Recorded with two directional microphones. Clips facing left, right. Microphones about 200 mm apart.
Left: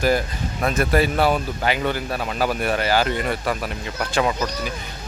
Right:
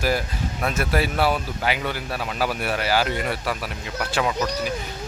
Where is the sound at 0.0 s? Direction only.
5° right (ahead or behind).